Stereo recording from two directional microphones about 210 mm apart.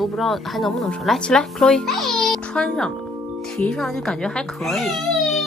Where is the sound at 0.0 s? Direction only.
Centre (ahead or behind).